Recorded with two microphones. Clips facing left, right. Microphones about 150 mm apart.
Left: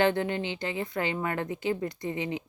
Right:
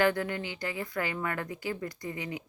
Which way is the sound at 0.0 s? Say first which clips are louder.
Left 2 dB; 25° left (ahead or behind).